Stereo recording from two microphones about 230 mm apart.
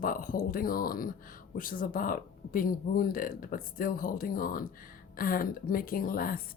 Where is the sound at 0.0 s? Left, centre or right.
Left.